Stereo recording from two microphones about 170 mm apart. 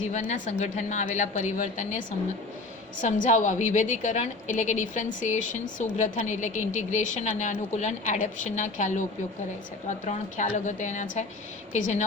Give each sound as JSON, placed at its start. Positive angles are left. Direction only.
{"t": 0.1, "sound": "a woman's voice", "side_deg": 45}